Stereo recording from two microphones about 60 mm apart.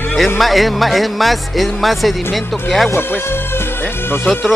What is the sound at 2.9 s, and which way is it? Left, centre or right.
Speech, left.